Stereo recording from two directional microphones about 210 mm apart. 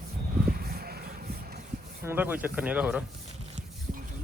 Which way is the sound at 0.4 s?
45° right (ahead or behind).